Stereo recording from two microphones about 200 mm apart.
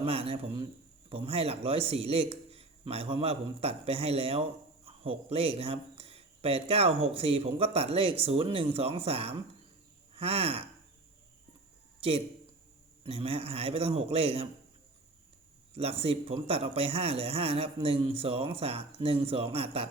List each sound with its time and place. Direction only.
0.0 s a man's voice: 30° right (ahead or behind)
11.9 s a man's voice: 30° right (ahead or behind)
15.7 s a man's voice: 30° right (ahead or behind)